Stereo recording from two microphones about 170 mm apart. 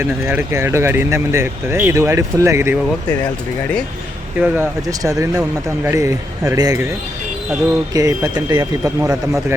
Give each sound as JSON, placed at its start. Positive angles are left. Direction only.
{"t": 0.0, "sound": "speech", "side_deg": -15}
{"t": 4.4, "sound": "speech", "side_deg": -10}
{"t": 4.9, "sound": "speech", "side_deg": -20}
{"t": 7.9, "sound": "speech", "side_deg": -20}